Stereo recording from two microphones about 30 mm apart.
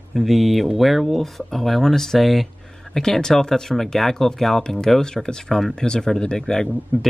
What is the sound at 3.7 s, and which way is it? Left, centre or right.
Speech, centre.